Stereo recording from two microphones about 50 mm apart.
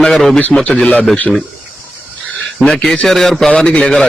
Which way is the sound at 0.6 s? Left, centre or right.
Left.